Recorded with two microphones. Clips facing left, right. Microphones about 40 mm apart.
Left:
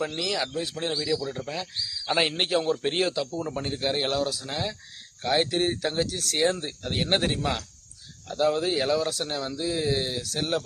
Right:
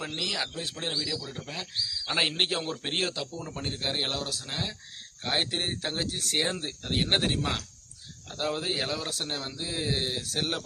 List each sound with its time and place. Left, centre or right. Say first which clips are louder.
0.2 s speech: left 4 dB; centre
1.0 s speech: left 7 dB; centre
3.3 s speech: left 5 dB; centre
5.2 s speech: left 5 dB; centre
8.3 s speech: left 7 dB; centre
9.4 s speech: left 5 dB; right
9.6 s speech: left 4 dB; centre